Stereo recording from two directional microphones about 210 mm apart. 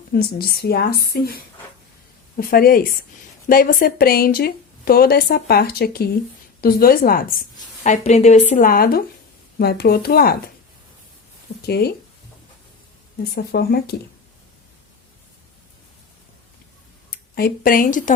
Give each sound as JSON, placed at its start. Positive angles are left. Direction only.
{"t": 0.1, "sound": "a woman's voice", "side_deg": 45}
{"t": 7.9, "sound": "a woman's voice", "side_deg": 30}
{"t": 11.6, "sound": "a woman's voice", "side_deg": 50}
{"t": 13.3, "sound": "a woman's voice", "side_deg": 45}
{"t": 17.1, "sound": "speech", "side_deg": 45}